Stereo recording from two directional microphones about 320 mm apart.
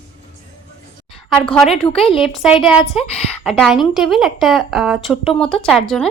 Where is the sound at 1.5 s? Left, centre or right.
Centre.